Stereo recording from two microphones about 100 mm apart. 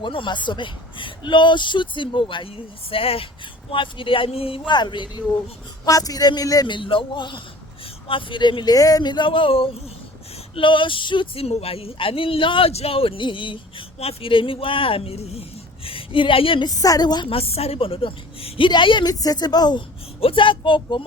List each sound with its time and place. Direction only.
0.0 s speech: 55° left (ahead or behind)
2.9 s a woman's voice: 65° left (ahead or behind)
4.7 s speech: 50° left (ahead or behind)
5.8 s speech: 35° left (ahead or behind)
6.7 s speech: 55° left (ahead or behind)
11.4 s speech: 80° left; by 16.6 s 60° left (ahead or behind)
16.6 s speech: 35° left (ahead or behind)
17.2 s a woman's voice: 75° left (ahead or behind)
18.7 s speech: 50° left (ahead or behind)
20.2 s speech: 60° left (ahead or behind)